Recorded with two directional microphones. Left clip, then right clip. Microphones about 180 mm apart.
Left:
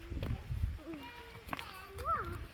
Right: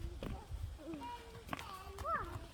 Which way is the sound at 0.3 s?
Centre (ahead or behind).